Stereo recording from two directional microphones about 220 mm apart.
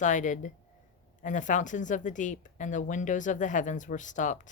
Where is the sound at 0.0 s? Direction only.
35° left (ahead or behind).